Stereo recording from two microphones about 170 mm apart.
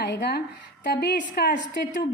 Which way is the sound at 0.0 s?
80° left.